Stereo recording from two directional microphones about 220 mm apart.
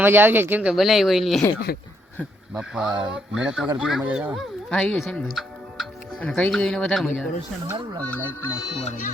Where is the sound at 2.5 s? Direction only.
5° right (ahead or behind).